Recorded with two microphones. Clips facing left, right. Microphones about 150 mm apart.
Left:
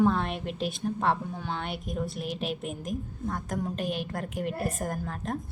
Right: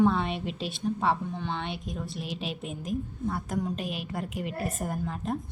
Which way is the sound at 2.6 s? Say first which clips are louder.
Even; 45° left (ahead or behind).